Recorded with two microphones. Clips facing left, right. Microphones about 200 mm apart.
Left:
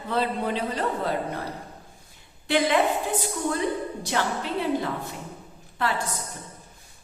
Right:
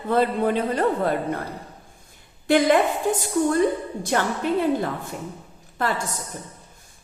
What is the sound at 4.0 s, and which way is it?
A woman's voice, 50° right (ahead or behind).